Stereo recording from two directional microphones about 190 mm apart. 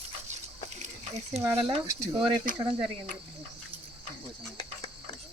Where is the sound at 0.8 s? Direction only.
35° right (ahead or behind).